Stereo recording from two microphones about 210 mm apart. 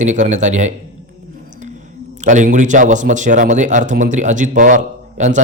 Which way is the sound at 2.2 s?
35° right (ahead or behind).